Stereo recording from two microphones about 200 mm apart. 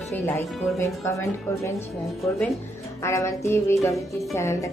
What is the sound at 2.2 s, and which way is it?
Speech, centre (ahead or behind).